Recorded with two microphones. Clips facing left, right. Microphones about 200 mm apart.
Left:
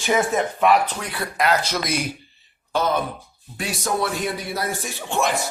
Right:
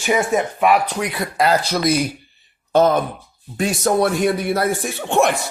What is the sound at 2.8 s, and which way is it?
A man's voice, 50° right (ahead or behind).